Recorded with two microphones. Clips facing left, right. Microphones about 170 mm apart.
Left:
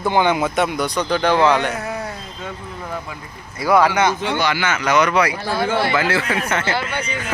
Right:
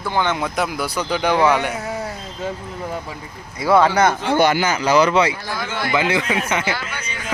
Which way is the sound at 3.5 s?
25° right (ahead or behind).